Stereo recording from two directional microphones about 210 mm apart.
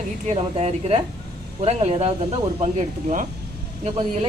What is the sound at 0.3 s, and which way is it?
Speech, 30° right (ahead or behind).